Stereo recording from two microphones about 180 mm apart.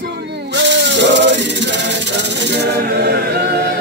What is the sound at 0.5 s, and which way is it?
Music, 75° right (ahead or behind).